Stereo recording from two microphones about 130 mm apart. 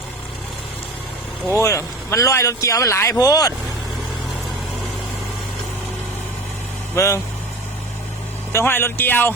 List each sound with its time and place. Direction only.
1.5 s speech: 20° left (ahead or behind)
6.9 s speech: 20° left (ahead or behind)
8.5 s speech: 15° left (ahead or behind)